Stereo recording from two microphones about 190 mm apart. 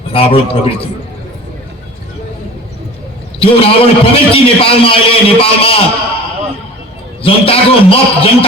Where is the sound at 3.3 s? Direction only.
30° left (ahead or behind).